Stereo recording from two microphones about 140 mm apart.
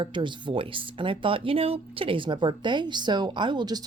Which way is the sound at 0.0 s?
35° right (ahead or behind).